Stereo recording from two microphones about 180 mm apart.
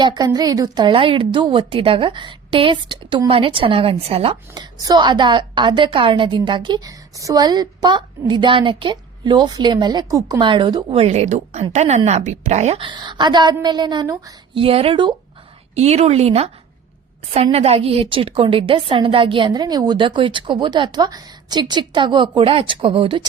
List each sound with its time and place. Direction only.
0.0 s a woman's voice: 20° right (ahead or behind); by 12.8 s 40° right (ahead or behind)
12.8 s a woman's voice: 25° right (ahead or behind)